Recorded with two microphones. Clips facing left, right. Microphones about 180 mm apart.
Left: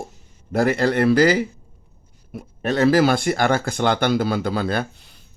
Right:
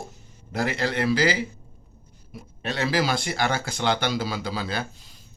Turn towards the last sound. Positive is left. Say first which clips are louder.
# left 7 dB
turn(degrees=60)  # may be behind; listen again after turning